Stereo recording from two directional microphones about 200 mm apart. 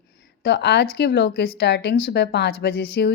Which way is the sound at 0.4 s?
55° left (ahead or behind).